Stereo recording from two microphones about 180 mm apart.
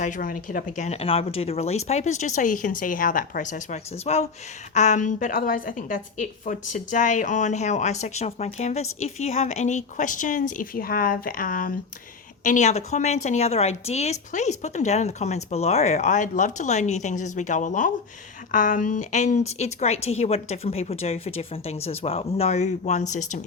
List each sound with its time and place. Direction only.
0.0 s a woman's voice: 50° left (ahead or behind)